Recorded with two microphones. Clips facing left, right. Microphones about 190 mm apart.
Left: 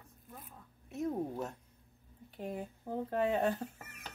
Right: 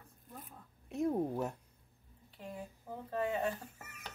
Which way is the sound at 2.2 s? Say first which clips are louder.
Left 5 dB; 55° left (ahead or behind).